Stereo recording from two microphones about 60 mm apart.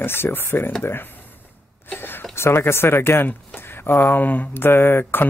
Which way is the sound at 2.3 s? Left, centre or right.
Left.